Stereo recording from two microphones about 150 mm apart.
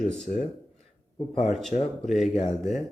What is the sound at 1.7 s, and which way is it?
Speech, 45° left (ahead or behind).